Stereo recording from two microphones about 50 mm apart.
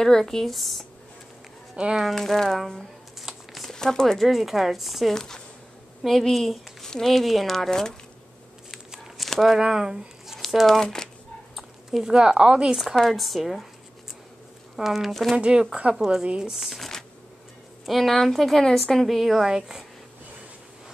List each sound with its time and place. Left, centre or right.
0.0 s speech: centre
2.0 s speech: centre
3.2 s a sound: centre
3.7 s speech: centre
4.2 s speech: centre
5.1 s speech: centre
9.2 s a sound: centre
9.6 s speech: centre
10.8 s speech: centre
12.0 s speech: centre
12.7 s speech: centre
14.8 s speech: centre
15.3 s a woman's voice: centre
19.0 s speech: centre